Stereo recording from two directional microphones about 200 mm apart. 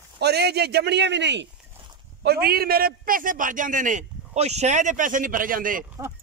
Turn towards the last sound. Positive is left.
turn(degrees=-45)  # may be behind; listen again after turning